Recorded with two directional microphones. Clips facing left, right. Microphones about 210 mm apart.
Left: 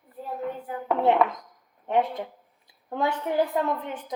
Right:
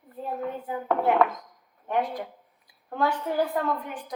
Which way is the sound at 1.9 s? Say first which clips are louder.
Left 3 dB; 25° left (ahead or behind).